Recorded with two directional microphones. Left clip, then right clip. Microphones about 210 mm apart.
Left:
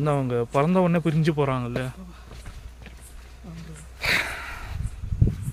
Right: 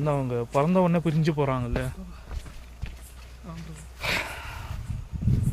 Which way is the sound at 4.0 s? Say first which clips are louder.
Left 5 dB; 15° left (ahead or behind).